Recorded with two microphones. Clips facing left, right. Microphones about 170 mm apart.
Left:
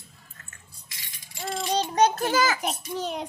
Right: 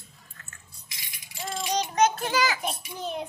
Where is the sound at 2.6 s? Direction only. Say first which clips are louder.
Left 3 dB; 85° left.